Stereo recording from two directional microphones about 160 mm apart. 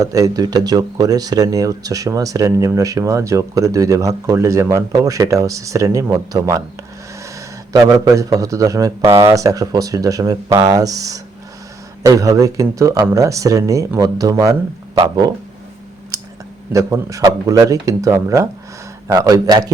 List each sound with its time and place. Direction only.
0.0 s speech: 20° right (ahead or behind)
7.7 s speech: 20° right (ahead or behind)
16.7 s speech: 20° right (ahead or behind)